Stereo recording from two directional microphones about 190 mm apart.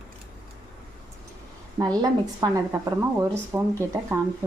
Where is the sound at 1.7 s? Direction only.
20° right (ahead or behind).